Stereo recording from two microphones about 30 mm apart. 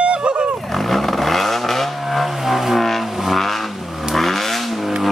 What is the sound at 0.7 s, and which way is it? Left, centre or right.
Vehicle, centre.